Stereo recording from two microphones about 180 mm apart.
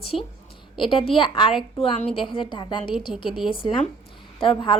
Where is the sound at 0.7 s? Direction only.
25° left (ahead or behind).